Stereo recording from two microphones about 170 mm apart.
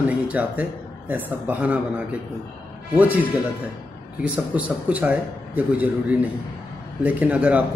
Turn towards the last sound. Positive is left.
turn(degrees=-10)  # may be behind; listen again after turning